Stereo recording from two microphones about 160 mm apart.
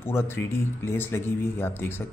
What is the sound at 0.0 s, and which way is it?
Speech, 15° left (ahead or behind).